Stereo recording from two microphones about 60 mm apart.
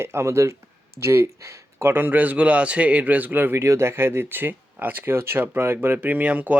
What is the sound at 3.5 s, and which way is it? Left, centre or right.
Speech, right.